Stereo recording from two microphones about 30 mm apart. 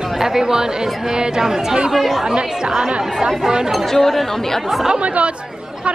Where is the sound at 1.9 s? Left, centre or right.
Centre.